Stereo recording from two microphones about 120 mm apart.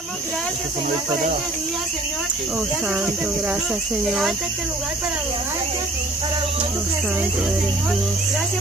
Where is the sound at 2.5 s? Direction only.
10° right (ahead or behind).